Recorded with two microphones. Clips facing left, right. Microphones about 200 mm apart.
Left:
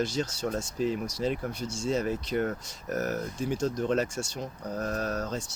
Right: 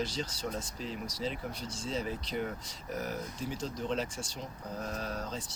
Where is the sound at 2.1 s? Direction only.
60° left (ahead or behind).